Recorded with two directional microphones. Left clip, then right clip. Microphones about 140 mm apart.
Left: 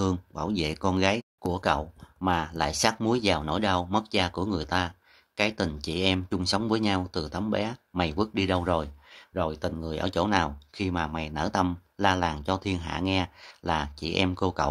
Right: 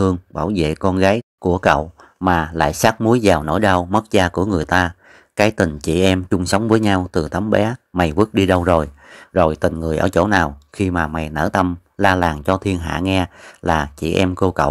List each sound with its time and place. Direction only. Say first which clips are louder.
0.0 s speech: right 10 dB; 40° right (ahead or behind)